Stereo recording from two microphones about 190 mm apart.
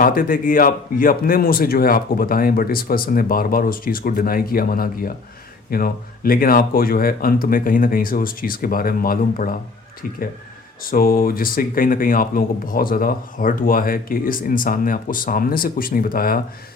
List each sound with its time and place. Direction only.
0.0 s speech: 45° left (ahead or behind)
10.8 s speech: 50° left (ahead or behind)